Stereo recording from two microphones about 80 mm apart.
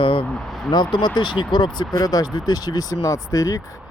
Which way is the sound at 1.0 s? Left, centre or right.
Left.